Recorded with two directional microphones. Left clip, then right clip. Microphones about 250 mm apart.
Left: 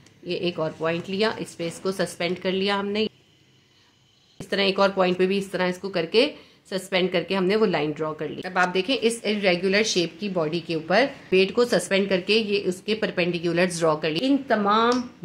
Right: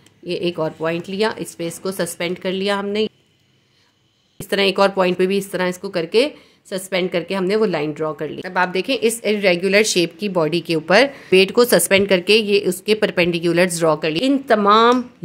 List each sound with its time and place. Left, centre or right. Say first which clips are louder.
0.3 s speech: right 5 dB; right
4.4 s speech: right 5 dB; right
14.2 s speech: right 8 dB; right